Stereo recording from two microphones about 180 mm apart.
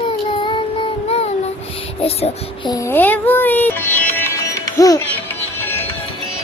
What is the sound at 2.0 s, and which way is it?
Speech, 35° left (ahead or behind).